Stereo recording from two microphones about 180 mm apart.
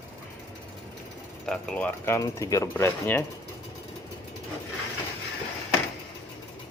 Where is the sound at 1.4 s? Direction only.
5° left (ahead or behind).